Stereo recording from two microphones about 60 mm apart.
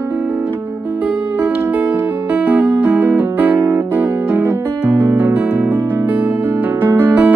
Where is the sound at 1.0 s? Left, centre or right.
Right.